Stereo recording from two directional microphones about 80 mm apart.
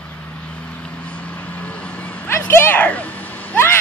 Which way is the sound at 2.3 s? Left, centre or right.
Left.